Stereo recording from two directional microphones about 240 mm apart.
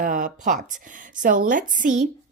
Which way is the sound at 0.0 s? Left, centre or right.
Right.